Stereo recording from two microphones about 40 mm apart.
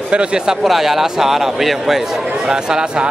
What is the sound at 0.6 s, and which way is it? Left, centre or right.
Speech, centre.